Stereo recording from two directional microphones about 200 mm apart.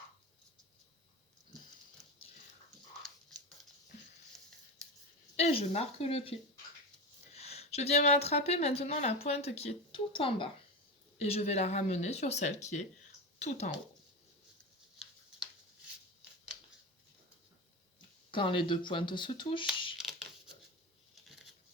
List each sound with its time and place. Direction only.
5.4 s speech: 30° left (ahead or behind)
7.3 s speech: 30° left (ahead or behind)
18.3 s speech: 25° left (ahead or behind)